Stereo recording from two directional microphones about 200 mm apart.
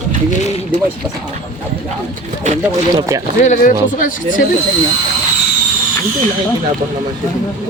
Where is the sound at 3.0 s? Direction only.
15° right (ahead or behind).